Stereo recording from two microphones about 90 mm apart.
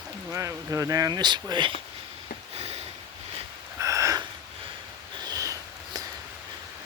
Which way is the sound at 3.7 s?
35° right (ahead or behind).